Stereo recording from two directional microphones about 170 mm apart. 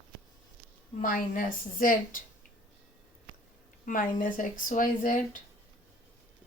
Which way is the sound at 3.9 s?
55° left (ahead or behind).